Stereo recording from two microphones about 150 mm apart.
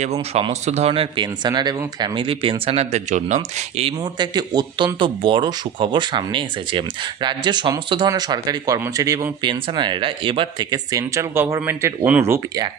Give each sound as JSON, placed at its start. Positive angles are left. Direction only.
{"t": 0.0, "sound": "speech", "side_deg": -45}
{"t": 4.0, "sound": "speech", "side_deg": -30}